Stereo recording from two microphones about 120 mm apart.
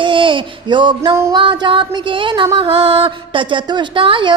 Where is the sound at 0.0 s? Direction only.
45° right (ahead or behind).